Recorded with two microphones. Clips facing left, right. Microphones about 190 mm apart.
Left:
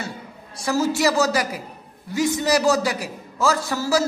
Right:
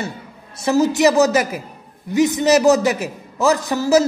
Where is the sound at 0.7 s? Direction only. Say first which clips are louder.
Right 6 dB; 20° right (ahead or behind).